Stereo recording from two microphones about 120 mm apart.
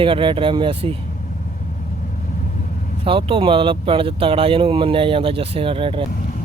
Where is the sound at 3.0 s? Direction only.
45° right (ahead or behind).